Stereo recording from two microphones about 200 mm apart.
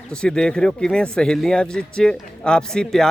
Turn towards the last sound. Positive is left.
turn(degrees=5)  # may be behind; listen again after turning